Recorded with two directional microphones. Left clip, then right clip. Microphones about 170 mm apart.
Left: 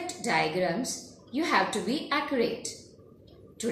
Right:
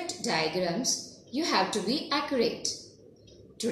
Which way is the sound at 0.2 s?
Centre (ahead or behind).